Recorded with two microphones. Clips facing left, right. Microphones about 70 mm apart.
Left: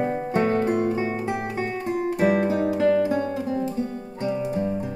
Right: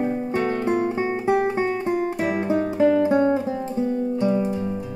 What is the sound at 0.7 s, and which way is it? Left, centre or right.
Music, right.